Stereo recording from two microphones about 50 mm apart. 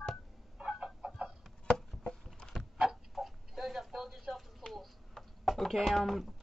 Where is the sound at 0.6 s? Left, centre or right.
Centre.